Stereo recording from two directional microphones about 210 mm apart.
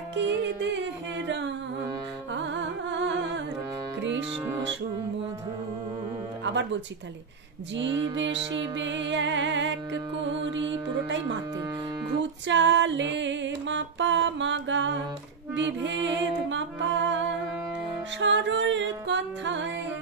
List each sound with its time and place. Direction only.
0.1 s music: 55° right (ahead or behind)
2.3 s music: 60° right (ahead or behind)
6.4 s speech: 60° right (ahead or behind)
8.7 s music: 60° right (ahead or behind)
12.2 s music: 60° right (ahead or behind)